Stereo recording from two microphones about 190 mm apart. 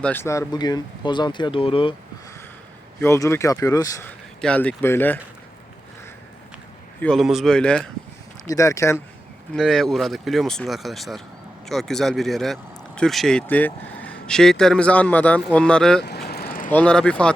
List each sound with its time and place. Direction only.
0.0 s speech: 10° left (ahead or behind); by 2.0 s 30° left (ahead or behind)
3.0 s speech: 15° left (ahead or behind)
4.4 s speech: 5° left (ahead or behind)
7.0 s speech: centre (ahead or behind)
8.4 s speech: 15° left (ahead or behind)
9.6 s speech: centre (ahead or behind)
16.0 s vehicle: 55° left (ahead or behind)
16.7 s speech: 5° left (ahead or behind)